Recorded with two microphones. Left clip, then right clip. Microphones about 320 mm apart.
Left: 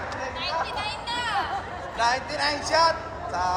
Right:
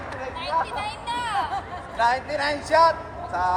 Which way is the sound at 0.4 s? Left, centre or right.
Right.